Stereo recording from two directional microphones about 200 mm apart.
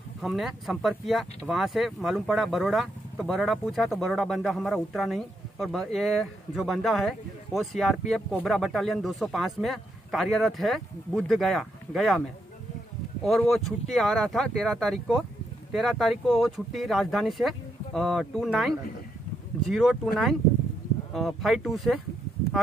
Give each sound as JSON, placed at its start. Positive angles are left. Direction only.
{"t": 0.2, "sound": "speech", "side_deg": 0}
{"t": 13.2, "sound": "speech", "side_deg": 0}
{"t": 21.1, "sound": "speech", "side_deg": 0}